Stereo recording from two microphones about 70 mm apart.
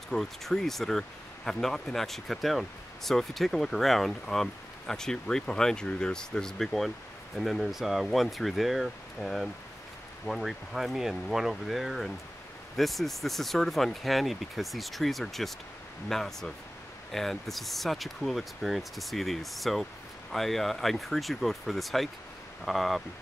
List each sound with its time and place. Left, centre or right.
0.1 s speech: centre